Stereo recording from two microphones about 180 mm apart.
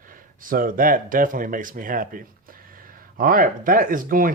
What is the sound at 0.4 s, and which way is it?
Speech, 50° right (ahead or behind).